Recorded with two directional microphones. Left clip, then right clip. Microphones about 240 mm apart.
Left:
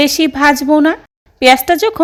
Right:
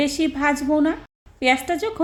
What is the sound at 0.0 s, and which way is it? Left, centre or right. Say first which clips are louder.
Speech: left 10 dB; left.